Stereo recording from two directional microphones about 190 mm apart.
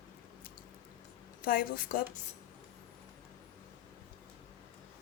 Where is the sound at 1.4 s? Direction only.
50° left (ahead or behind).